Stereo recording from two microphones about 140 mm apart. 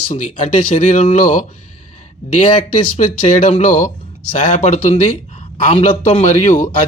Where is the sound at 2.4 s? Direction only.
55° left (ahead or behind).